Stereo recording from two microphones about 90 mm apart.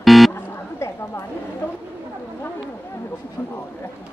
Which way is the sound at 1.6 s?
25° left (ahead or behind).